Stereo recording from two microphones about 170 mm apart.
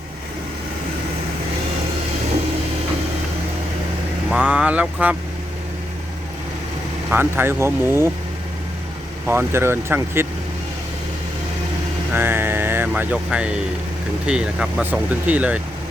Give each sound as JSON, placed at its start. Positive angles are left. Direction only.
{"t": 4.3, "sound": "speech", "side_deg": -5}
{"t": 7.1, "sound": "speech", "side_deg": -10}
{"t": 9.2, "sound": "speech", "side_deg": -15}
{"t": 12.1, "sound": "speech", "side_deg": -10}